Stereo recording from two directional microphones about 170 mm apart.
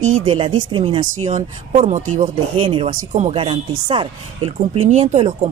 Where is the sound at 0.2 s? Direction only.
30° right (ahead or behind).